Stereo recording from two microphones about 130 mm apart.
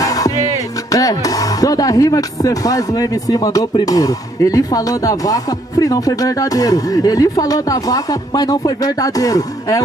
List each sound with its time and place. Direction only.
0.0 s music: 25° left (ahead or behind)
0.9 s speech: 25° left (ahead or behind)